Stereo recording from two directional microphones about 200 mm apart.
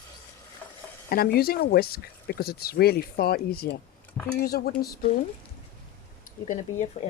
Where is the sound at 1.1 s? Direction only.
50° left (ahead or behind).